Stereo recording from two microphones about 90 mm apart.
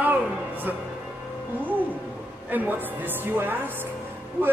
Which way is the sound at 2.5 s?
20° right (ahead or behind).